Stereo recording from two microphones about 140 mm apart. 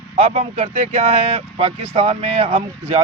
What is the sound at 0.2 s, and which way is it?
Speech, 55° right (ahead or behind).